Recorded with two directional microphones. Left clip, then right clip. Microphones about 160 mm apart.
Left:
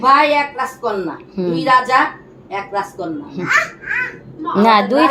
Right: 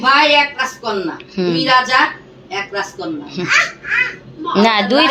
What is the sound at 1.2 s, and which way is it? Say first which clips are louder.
Speech: right 2 dB; centre (ahead or behind).